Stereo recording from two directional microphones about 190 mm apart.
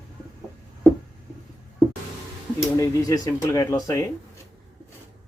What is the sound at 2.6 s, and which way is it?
Speech, 15° left (ahead or behind).